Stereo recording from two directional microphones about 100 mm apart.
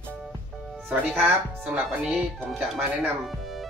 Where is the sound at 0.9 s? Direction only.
20° right (ahead or behind).